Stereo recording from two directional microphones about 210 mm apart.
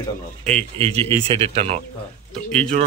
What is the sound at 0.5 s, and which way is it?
Speech, 30° right (ahead or behind).